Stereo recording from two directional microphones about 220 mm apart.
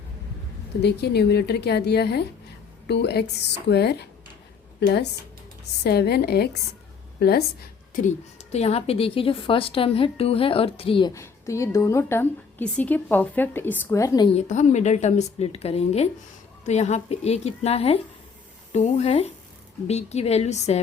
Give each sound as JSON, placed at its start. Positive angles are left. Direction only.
{"t": 0.8, "sound": "a woman's voice", "side_deg": 50}
{"t": 5.8, "sound": "a woman's voice", "side_deg": 45}
{"t": 7.9, "sound": "a woman's voice", "side_deg": 30}
{"t": 14.3, "sound": "a woman's voice", "side_deg": 30}